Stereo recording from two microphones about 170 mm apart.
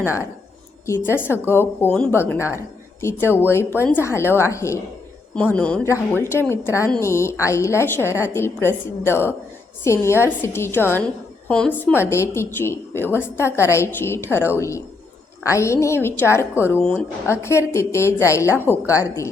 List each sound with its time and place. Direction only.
0.9 s a woman's voice: 15° left (ahead or behind)